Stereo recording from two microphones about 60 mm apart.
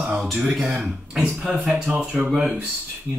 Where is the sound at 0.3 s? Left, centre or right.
Centre.